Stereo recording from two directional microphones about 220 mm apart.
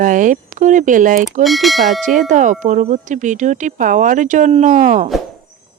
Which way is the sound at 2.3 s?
35° right (ahead or behind).